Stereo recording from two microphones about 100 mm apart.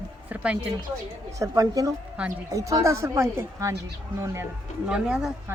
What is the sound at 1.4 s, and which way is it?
Speech, 35° right (ahead or behind).